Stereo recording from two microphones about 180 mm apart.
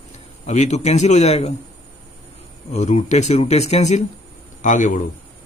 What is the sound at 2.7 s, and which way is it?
Speech, 40° left (ahead or behind).